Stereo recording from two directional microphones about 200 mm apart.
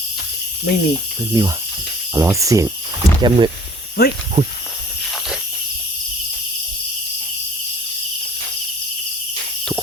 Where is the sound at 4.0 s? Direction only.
50° left (ahead or behind).